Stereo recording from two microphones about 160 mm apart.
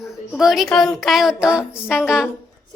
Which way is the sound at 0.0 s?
Centre (ahead or behind).